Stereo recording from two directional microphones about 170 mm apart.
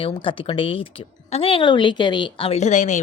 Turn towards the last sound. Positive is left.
turn(degrees=45)  # may be behind; listen again after turning